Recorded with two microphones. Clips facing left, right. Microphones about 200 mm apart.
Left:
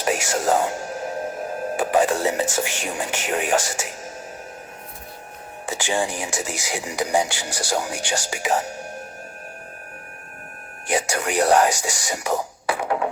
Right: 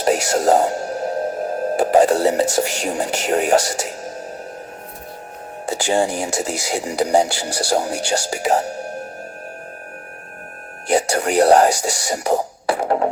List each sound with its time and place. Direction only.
0.0 s speech: 40° right (ahead or behind)
5.6 s music: 40° right (ahead or behind)
6.1 s speech: 40° right (ahead or behind)
10.8 s speech: 40° right (ahead or behind)